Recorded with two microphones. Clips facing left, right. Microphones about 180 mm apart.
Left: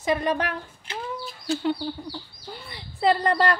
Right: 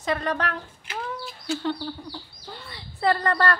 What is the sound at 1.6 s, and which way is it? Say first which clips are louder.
A woman's voice: left 2 dB; 15° left (ahead or behind).